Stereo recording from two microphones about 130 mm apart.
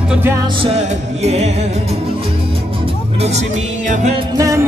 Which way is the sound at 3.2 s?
60° right (ahead or behind).